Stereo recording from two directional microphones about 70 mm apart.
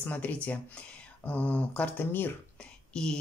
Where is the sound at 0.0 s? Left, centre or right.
Left.